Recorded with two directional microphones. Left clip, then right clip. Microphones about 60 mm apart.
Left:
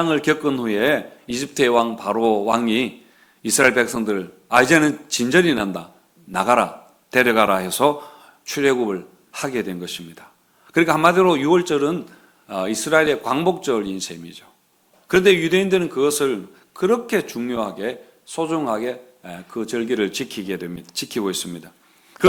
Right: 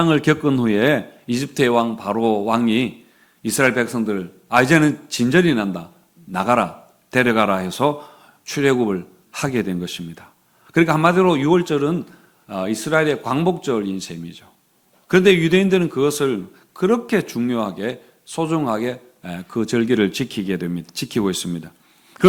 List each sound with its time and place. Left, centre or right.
0.0 s a man's voice: right
1.5 s a man's voice: centre
8.6 s a man's voice: right
10.7 s a man's voice: centre
15.0 s a man's voice: right
19.9 s a man's voice: right
22.2 s a sound: right